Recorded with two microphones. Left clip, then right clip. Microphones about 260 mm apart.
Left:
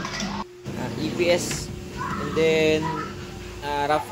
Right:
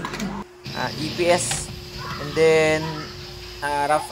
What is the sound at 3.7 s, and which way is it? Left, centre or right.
Speech, centre.